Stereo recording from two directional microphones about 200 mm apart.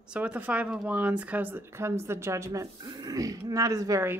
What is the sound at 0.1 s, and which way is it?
Speech, 5° right (ahead or behind).